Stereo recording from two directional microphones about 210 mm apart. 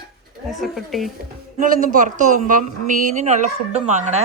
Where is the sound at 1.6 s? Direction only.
40° right (ahead or behind).